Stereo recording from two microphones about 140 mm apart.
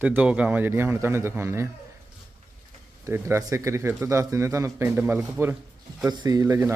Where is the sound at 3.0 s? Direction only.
20° right (ahead or behind).